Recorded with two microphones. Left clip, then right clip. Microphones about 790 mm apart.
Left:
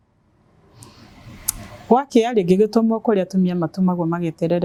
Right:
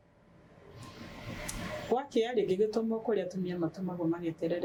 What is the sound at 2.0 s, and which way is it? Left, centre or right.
Speech, left.